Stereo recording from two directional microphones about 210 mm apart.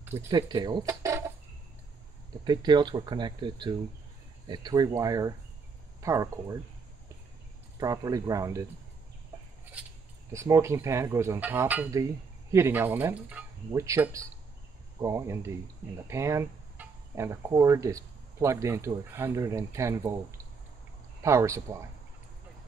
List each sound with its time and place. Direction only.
0.3 s speech: 20° right (ahead or behind)
2.4 s speech: 20° right (ahead or behind)
7.8 s speech: 15° right (ahead or behind)
10.3 s speech: 15° right (ahead or behind)